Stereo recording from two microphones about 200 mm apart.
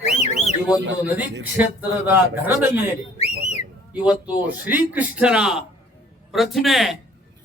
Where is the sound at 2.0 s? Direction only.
10° right (ahead or behind).